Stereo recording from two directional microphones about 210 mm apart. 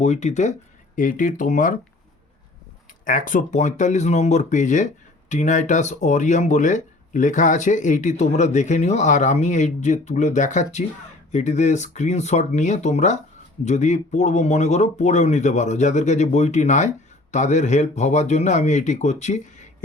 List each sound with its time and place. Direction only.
0.0 s speech: 35° left (ahead or behind)
3.0 s speech: 40° left (ahead or behind)